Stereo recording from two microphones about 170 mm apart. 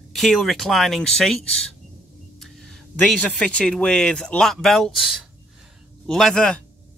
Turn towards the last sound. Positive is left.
turn(degrees=5)  # may be behind; listen again after turning